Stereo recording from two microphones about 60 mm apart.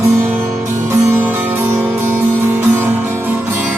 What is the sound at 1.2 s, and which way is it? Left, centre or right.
Music, right.